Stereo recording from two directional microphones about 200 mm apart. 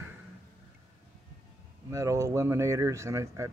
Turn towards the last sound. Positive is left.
turn(degrees=-15)  # may be behind; listen again after turning